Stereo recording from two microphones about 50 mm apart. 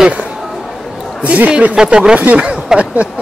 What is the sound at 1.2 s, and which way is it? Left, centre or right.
Speech, right.